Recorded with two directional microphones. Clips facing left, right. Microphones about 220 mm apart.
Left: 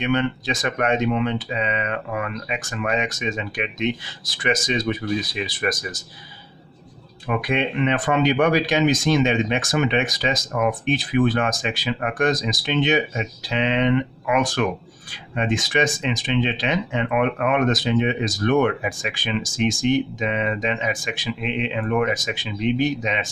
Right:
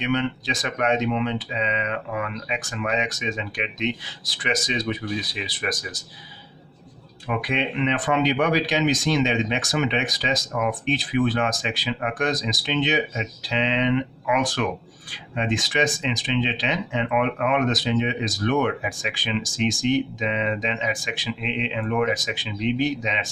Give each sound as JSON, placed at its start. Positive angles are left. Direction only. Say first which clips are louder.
{"t": 0.0, "sound": "speech", "louder": "left 2 dB", "side_deg": 50}
{"t": 7.3, "sound": "speech", "louder": "left 3 dB", "side_deg": 50}